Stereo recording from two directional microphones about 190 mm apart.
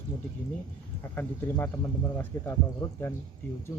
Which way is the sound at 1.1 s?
15° left (ahead or behind).